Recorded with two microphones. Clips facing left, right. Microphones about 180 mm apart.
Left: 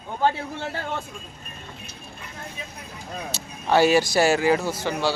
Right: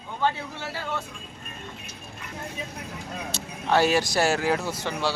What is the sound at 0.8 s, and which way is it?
Speech, 50° left (ahead or behind).